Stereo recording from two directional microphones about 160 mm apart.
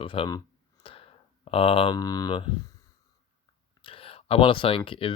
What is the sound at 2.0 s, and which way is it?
Speech, 25° left (ahead or behind).